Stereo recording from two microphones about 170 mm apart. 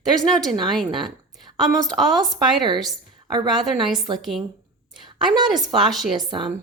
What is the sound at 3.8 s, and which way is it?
Speech, centre (ahead or behind).